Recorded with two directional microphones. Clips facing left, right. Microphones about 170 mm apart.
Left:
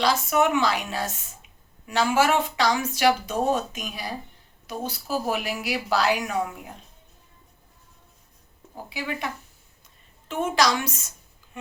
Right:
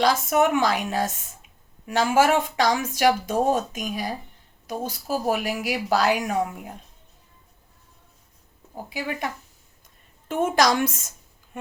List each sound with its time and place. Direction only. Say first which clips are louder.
0.0 s speech: right 2 dB; 50° right (ahead or behind)
8.9 s speech: right 1 dB; 45° right (ahead or behind)